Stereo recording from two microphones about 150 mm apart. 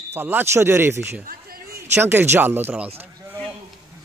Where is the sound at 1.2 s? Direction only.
80° right.